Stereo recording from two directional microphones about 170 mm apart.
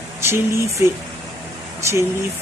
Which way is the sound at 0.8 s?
15° right (ahead or behind).